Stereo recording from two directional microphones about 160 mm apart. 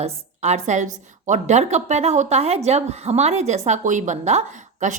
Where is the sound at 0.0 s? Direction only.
45° right (ahead or behind).